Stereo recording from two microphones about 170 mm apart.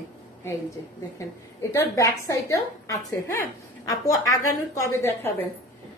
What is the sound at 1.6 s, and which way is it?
A woman's voice, 15° left (ahead or behind).